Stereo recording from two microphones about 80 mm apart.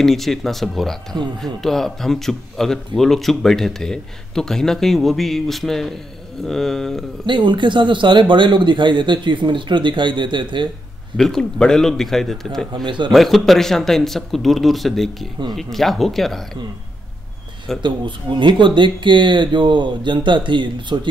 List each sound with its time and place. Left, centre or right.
0.0 s speech: centre
7.2 s speech: right
11.1 s speech: centre
12.7 s speech: right
13.1 s speech: centre
17.8 s speech: right